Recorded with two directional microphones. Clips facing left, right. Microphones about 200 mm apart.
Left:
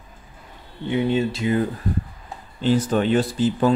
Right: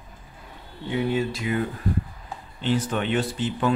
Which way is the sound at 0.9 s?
20° left (ahead or behind).